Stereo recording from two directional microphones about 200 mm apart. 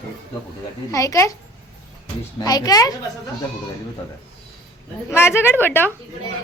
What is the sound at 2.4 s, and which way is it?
Speech, 20° left (ahead or behind).